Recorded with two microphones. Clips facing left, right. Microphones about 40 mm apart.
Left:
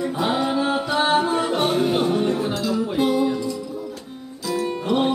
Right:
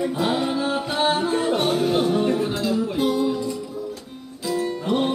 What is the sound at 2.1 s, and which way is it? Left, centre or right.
Music, centre.